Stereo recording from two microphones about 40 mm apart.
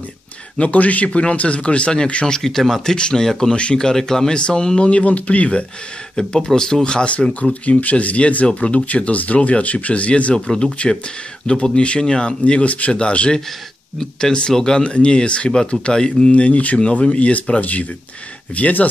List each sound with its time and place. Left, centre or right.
0.6 s speech: left
2.3 s speech: centre
2.8 s speech: centre
3.5 s speech: left
3.8 s speech: centre
7.6 s speech: left
10.3 s speech: centre
14.5 s speech: centre
14.8 s speech: left
16.3 s speech: left